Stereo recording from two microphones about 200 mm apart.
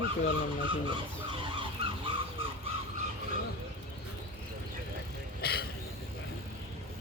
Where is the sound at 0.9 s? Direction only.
25° right (ahead or behind).